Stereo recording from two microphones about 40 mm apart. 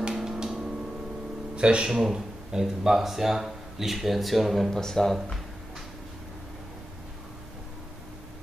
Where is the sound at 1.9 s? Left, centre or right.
Centre.